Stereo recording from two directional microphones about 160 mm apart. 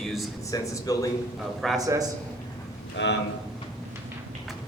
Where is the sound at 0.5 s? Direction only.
20° left (ahead or behind).